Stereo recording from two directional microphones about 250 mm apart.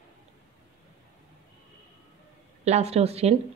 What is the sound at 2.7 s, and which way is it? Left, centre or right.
Speech, right.